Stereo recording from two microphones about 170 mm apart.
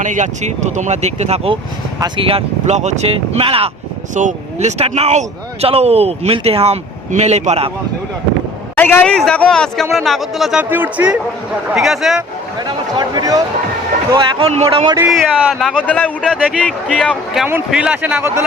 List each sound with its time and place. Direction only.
0.0 s a man's voice: 45° right (ahead or behind)
4.1 s a man's voice: 45° right (ahead or behind)
8.7 s speech: 10° left (ahead or behind)
12.5 s a sound: 25° right (ahead or behind)
14.1 s a man's voice: 30° right (ahead or behind)
15.1 s a man's voice: centre (ahead or behind); by 18.4 s 15° right (ahead or behind)